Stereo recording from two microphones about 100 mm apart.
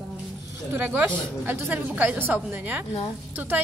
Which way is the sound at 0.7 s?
15° right (ahead or behind).